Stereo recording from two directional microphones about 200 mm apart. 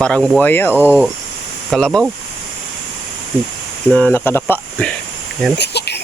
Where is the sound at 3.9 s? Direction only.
5° left (ahead or behind).